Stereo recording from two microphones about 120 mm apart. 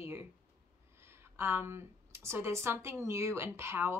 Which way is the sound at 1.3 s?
20° right (ahead or behind).